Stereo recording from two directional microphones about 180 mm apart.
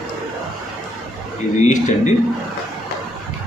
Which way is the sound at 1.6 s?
40° left (ahead or behind).